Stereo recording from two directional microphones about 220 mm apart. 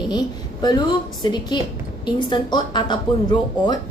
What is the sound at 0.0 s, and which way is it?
Speech, 20° left (ahead or behind).